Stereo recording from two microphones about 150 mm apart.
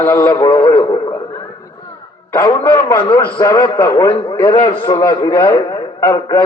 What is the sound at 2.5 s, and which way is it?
A man's voice, 30° left (ahead or behind).